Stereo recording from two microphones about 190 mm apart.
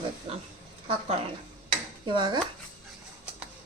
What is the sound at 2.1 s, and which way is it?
Speech, 20° right (ahead or behind).